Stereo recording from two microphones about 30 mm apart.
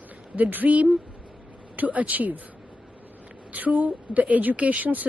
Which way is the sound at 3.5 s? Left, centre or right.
Right.